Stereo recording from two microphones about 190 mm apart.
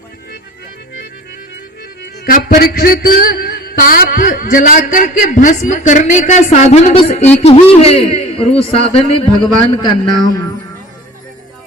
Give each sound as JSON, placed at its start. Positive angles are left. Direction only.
{"t": 2.2, "sound": "music", "side_deg": 50}